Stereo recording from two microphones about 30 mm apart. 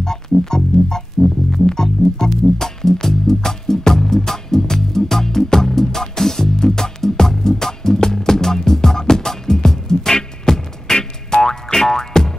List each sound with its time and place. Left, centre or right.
0.0 s music: centre